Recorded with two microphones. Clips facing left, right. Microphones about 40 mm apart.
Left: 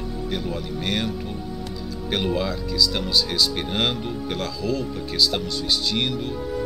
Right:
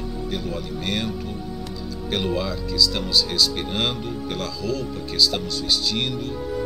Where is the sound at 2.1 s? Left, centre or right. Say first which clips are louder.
Left 1 dB; centre.